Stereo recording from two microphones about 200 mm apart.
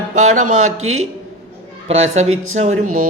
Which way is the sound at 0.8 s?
90° right.